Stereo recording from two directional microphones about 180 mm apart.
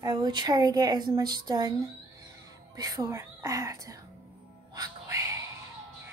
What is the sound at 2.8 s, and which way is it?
Speech, 20° right (ahead or behind).